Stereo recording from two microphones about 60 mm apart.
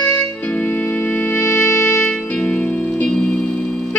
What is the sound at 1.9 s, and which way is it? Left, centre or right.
Music, centre.